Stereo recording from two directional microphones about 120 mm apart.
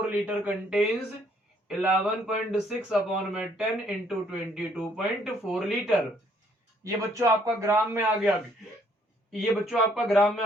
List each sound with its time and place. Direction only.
0.1 s speech: 10° right (ahead or behind)
6.8 s a man's voice: 30° right (ahead or behind)
9.3 s speech: centre (ahead or behind)